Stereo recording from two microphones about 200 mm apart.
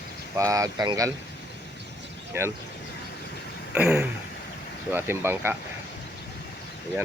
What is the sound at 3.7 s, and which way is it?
Speech, 5° right (ahead or behind).